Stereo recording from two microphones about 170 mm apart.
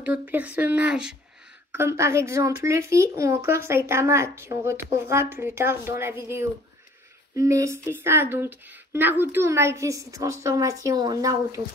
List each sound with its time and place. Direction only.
0.0 s speech: 10° right (ahead or behind)